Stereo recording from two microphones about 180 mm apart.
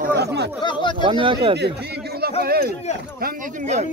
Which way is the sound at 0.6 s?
25° left (ahead or behind).